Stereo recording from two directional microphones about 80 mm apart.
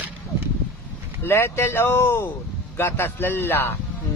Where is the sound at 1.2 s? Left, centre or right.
Left.